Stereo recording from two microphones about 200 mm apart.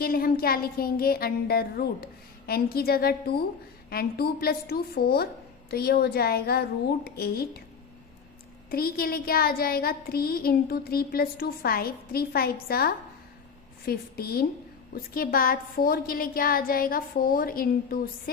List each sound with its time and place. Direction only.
0.0 s speech: 50° left (ahead or behind)
8.7 s speech: 50° left (ahead or behind)